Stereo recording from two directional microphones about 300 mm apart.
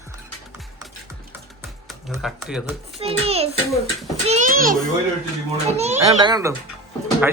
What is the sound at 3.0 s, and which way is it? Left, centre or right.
A child's voice, centre.